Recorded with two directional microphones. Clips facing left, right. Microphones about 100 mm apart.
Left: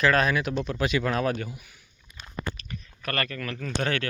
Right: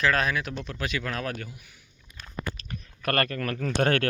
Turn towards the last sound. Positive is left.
turn(degrees=-50)  # may be behind; listen again after turning